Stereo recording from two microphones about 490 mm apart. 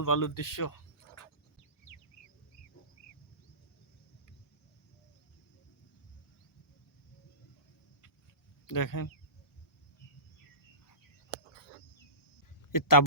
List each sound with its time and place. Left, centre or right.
0.0 s speech: left
1.9 s bird: left
8.6 s speech: left
11.3 s cricket: left
12.7 s speech: left